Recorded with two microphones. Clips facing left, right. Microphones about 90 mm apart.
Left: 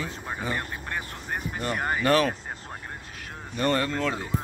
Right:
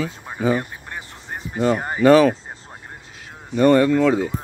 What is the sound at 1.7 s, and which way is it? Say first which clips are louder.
Speech: right 1 dB; 20° right (ahead or behind).